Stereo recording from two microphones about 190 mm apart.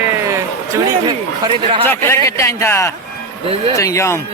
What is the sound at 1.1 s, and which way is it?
Speech, 25° right (ahead or behind).